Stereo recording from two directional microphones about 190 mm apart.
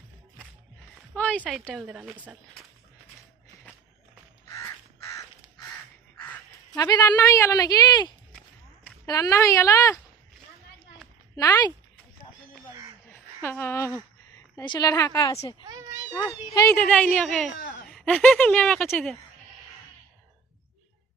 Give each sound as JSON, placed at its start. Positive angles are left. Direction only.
{"t": 1.1, "sound": "a woman's voice", "side_deg": 10}
{"t": 5.0, "sound": "crow", "side_deg": 15}
{"t": 6.7, "sound": "speech", "side_deg": 20}
{"t": 11.3, "sound": "speech", "side_deg": 20}
{"t": 13.1, "sound": "a sound", "side_deg": 10}
{"t": 14.5, "sound": "speech", "side_deg": 20}
{"t": 16.8, "sound": "a woman's voice", "side_deg": 5}